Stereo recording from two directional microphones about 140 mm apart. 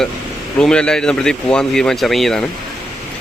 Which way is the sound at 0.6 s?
5° left (ahead or behind).